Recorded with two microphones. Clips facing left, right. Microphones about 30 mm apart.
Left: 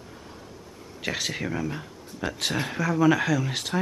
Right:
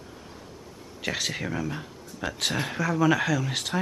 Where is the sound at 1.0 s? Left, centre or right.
Centre.